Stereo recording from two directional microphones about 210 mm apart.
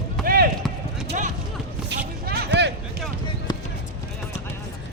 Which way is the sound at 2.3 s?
50° right (ahead or behind).